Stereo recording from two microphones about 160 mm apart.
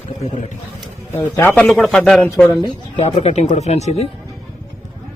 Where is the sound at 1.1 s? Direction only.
15° left (ahead or behind).